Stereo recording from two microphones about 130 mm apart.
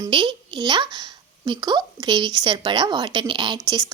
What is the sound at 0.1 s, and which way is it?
Speech, 40° right (ahead or behind).